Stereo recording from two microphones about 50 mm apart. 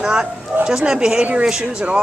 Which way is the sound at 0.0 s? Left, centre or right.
Centre.